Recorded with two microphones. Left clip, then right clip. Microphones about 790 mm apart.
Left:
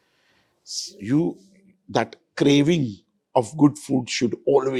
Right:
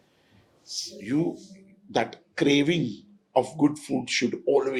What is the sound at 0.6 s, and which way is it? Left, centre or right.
Speech, left.